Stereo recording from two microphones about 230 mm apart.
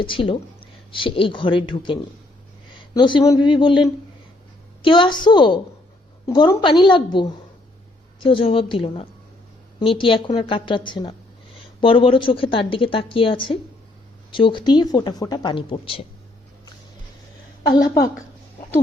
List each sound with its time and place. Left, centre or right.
0.0 s a woman's voice: left
17.7 s a woman's voice: left